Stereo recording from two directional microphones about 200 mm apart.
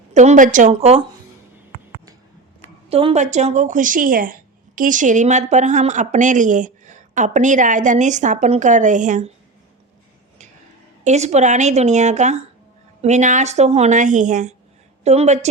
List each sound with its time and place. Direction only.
0.1 s a woman's voice: 35° right (ahead or behind)
2.9 s a woman's voice: 30° right (ahead or behind)
11.0 s a woman's voice: 35° right (ahead or behind)